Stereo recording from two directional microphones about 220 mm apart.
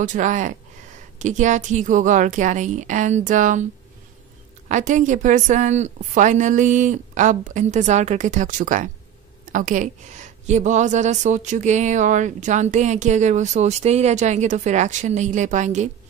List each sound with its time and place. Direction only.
0.0 s speech: 35° right (ahead or behind)
4.6 s speech: 35° right (ahead or behind)